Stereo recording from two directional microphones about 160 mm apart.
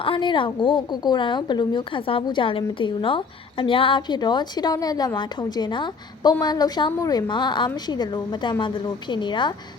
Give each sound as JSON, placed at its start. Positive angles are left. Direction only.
{"t": 0.0, "sound": "a woman's voice", "side_deg": 30}